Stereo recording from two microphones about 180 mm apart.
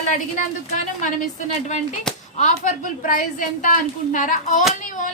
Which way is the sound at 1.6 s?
40° left (ahead or behind).